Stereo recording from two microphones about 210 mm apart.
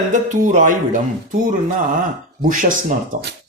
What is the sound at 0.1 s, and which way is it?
Speech, 40° right (ahead or behind).